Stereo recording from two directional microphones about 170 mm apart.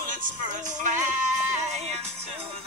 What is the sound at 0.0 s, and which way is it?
Speech, 45° right (ahead or behind).